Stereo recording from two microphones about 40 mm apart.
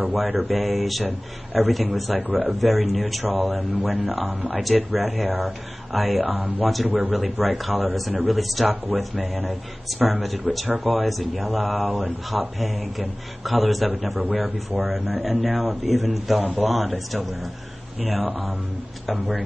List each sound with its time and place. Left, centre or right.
0.1 s speech: centre